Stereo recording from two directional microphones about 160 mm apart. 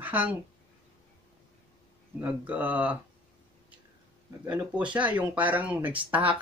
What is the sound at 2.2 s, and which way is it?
Speech, 10° right (ahead or behind).